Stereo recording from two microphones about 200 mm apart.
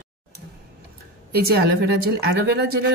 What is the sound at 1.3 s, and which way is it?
Speech, 50° right (ahead or behind).